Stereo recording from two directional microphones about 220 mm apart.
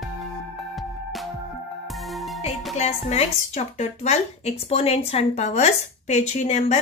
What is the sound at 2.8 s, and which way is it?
A woman's voice, 30° left (ahead or behind).